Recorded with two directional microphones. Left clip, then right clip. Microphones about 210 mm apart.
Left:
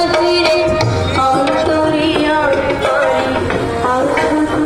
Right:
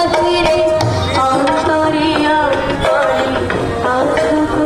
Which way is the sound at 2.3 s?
30° right (ahead or behind).